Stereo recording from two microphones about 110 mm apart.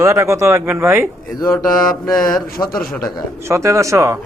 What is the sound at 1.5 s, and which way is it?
Speech, 5° left (ahead or behind).